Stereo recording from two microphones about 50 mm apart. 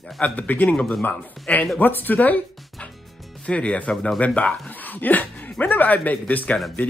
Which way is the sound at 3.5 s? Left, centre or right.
Left.